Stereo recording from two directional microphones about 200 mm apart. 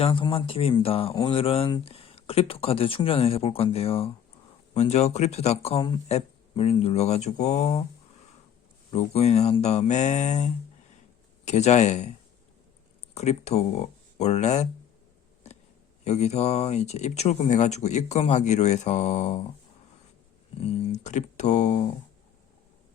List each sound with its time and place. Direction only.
0.0 s speech: 25° left (ahead or behind)
8.9 s speech: 30° left (ahead or behind)
13.1 s speech: 35° left (ahead or behind)
16.0 s speech: 35° left (ahead or behind)
20.6 s speech: 30° left (ahead or behind)